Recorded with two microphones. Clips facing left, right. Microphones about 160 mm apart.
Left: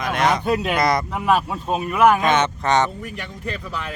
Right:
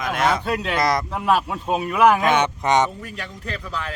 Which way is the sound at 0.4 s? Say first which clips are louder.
Left 3 dB; 15° left (ahead or behind).